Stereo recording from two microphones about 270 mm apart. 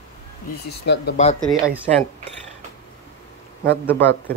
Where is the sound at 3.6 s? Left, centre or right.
Centre.